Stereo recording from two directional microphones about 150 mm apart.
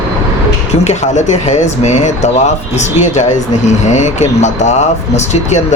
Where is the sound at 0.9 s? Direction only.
50° left (ahead or behind).